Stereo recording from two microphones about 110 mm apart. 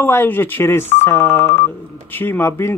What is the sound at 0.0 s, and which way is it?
Speech, 20° left (ahead or behind).